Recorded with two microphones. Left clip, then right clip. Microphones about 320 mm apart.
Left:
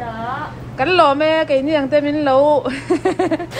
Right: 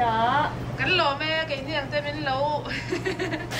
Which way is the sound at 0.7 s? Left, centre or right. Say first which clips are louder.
Left 10 dB; centre.